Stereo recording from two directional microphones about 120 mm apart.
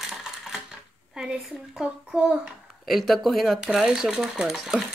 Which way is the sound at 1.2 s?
5° right (ahead or behind).